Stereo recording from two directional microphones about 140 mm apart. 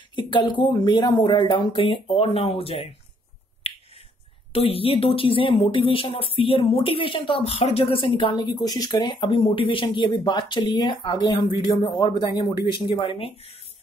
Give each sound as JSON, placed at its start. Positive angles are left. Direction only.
{"t": 0.1, "sound": "a woman's voice", "side_deg": 35}
{"t": 4.5, "sound": "a woman's voice", "side_deg": 45}